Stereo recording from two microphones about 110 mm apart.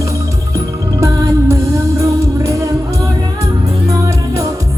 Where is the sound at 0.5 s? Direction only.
30° right (ahead or behind).